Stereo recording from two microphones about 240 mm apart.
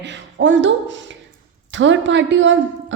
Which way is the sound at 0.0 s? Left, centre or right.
Right.